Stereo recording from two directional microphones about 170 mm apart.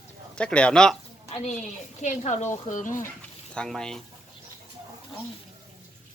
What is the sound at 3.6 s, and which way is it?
Speech, 5° left (ahead or behind).